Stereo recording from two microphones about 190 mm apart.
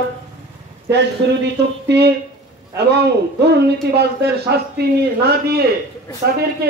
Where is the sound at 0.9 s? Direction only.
65° right (ahead or behind).